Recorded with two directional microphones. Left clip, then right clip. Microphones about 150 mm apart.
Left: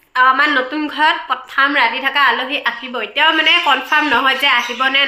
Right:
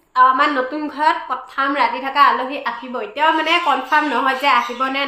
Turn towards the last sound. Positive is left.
turn(degrees=0)  # may be behind; listen again after turning